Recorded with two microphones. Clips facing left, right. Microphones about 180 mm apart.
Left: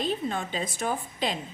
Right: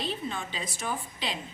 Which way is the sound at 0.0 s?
50° left (ahead or behind).